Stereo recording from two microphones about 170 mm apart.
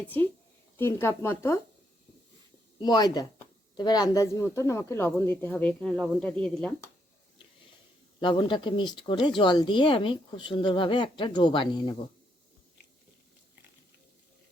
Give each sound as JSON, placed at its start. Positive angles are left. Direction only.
{"t": 0.8, "sound": "speech", "side_deg": 15}
{"t": 2.7, "sound": "speech", "side_deg": 25}
{"t": 8.2, "sound": "speech", "side_deg": 30}